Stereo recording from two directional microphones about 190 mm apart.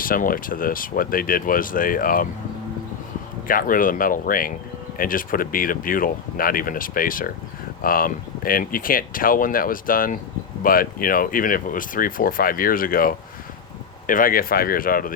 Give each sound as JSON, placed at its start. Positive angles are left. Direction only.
{"t": 0.0, "sound": "speech", "side_deg": 50}
{"t": 3.4, "sound": "speech", "side_deg": 45}